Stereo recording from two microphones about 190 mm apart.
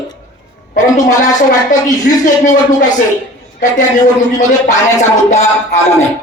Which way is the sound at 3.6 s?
40° left (ahead or behind).